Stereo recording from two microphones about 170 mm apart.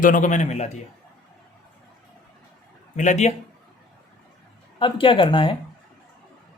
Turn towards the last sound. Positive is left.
turn(degrees=30)  # may be behind; listen again after turning